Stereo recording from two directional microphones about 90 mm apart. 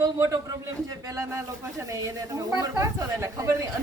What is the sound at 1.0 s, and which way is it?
Speech, 35° right (ahead or behind).